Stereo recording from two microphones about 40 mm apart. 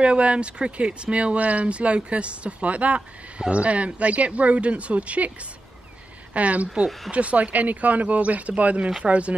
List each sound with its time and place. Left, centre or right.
0.0 s speech: right
6.3 s speech: right